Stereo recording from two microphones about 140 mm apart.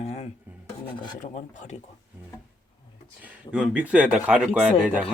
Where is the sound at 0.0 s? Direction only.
50° left (ahead or behind).